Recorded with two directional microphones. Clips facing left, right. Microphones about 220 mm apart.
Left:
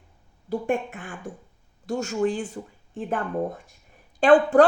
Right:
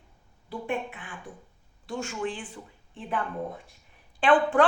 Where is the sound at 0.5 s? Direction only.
45° left (ahead or behind).